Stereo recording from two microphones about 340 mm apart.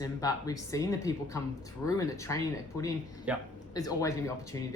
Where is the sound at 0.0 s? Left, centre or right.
Centre.